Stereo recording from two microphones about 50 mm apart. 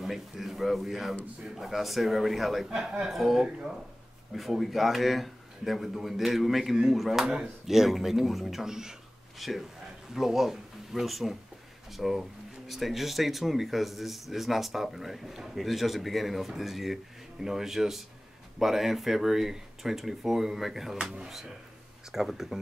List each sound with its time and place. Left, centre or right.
0.0 s speech: centre
22.1 s speech: centre